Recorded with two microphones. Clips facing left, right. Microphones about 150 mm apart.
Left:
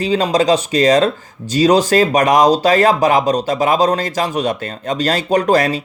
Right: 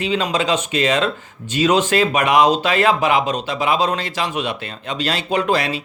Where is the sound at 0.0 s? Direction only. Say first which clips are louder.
Left 5 dB; 35° left (ahead or behind).